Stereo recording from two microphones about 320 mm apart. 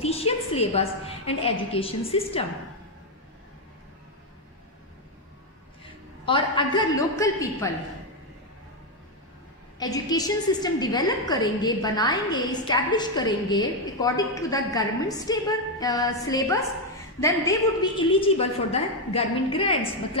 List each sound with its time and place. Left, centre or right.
0.0 s a sound: centre
1.4 s a woman's voice: centre
6.2 s a woman's voice: centre
9.8 s a woman's voice: centre